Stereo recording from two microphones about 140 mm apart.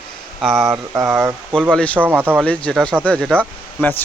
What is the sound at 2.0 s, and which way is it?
Speech, 15° right (ahead or behind).